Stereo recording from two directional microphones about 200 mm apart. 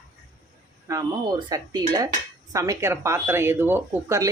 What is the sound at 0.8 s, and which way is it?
Speech, 15° right (ahead or behind).